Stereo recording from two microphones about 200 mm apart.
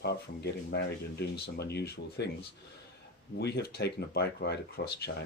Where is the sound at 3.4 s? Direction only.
55° left (ahead or behind).